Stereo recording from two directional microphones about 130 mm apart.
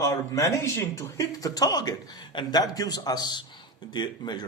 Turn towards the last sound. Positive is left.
turn(degrees=35)  # may be behind; listen again after turning